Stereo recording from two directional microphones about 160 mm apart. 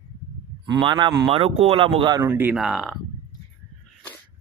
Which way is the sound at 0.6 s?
25° right (ahead or behind).